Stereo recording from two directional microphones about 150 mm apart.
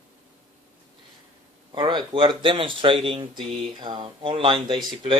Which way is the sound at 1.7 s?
35° right (ahead or behind).